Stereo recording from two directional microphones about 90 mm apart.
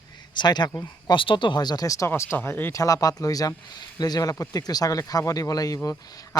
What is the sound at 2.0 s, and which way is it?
Speech, 30° left (ahead or behind).